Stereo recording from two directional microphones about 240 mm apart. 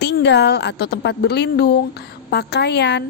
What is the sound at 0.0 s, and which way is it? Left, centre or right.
A woman's voice, left.